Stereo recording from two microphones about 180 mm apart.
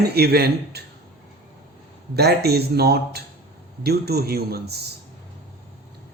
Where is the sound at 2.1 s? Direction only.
65° right (ahead or behind).